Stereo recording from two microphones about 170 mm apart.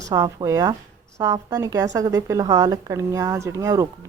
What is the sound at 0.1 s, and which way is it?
A woman's voice, 20° right (ahead or behind).